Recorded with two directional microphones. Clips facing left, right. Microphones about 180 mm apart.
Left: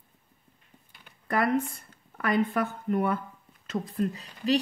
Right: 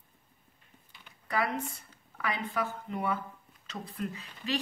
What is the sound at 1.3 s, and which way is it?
Speech, 55° left (ahead or behind).